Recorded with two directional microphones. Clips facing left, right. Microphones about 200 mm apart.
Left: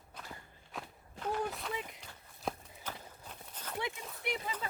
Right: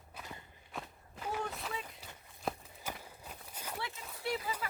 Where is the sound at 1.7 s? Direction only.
20° left (ahead or behind).